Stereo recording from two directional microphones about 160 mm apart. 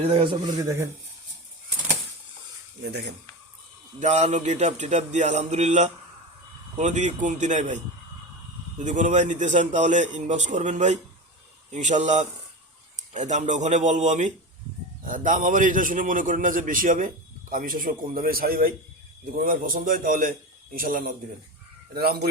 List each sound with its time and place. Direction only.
0.0 s a man's voice: 35° right (ahead or behind)
4.0 s a man's voice: 50° right (ahead or behind)
8.8 s a man's voice: 50° right (ahead or behind)
21.9 s speech: 80° right